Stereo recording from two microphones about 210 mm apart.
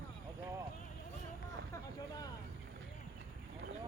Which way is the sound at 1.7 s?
20° left (ahead or behind).